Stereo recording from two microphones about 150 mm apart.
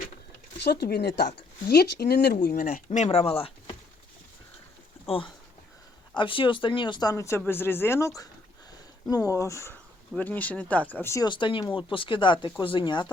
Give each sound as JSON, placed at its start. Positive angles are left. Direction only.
{"t": 0.6, "sound": "speech", "side_deg": 90}
{"t": 2.6, "sound": "speech", "side_deg": 65}
{"t": 5.0, "sound": "speech", "side_deg": 35}
{"t": 11.3, "sound": "speech", "side_deg": 35}